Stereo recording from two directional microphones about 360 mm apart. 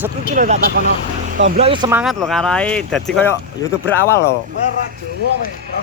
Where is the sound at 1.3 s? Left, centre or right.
Right.